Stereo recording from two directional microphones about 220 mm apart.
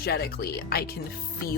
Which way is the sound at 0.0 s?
45° left (ahead or behind).